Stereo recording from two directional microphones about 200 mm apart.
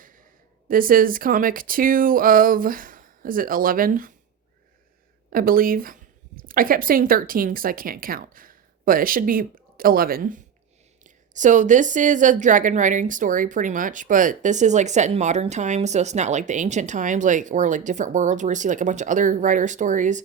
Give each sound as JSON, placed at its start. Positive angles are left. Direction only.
{"t": 0.7, "sound": "speech", "side_deg": -45}
{"t": 5.3, "sound": "a woman's voice", "side_deg": -45}